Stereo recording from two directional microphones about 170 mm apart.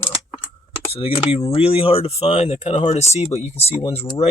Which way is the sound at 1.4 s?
35° left (ahead or behind).